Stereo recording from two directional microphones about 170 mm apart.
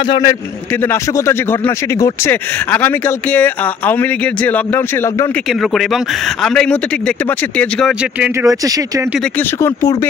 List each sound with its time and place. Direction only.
0.1 s a man's voice: 20° left (ahead or behind)
5.5 s speech: centre (ahead or behind)
8.2 s speech: 15° right (ahead or behind)